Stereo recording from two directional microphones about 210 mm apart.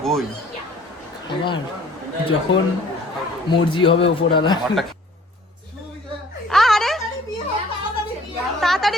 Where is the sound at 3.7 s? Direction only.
25° left (ahead or behind).